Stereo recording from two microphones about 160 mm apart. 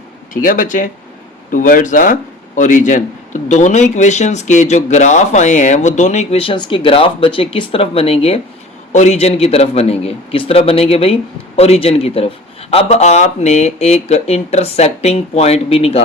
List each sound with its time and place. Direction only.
0.4 s a man's voice: 55° left (ahead or behind); by 16.0 s 40° left (ahead or behind)